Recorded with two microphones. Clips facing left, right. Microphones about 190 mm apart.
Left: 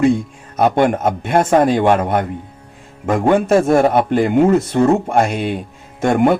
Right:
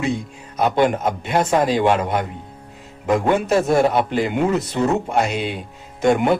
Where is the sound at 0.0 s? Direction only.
50° left (ahead or behind).